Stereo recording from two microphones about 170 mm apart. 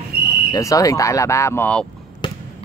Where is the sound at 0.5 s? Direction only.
20° left (ahead or behind).